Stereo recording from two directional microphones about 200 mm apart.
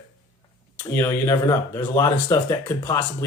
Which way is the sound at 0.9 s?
15° left (ahead or behind).